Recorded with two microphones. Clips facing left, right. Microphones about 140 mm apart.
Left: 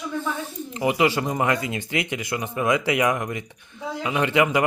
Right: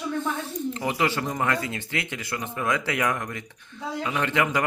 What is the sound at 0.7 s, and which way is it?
Speech, 15° left (ahead or behind).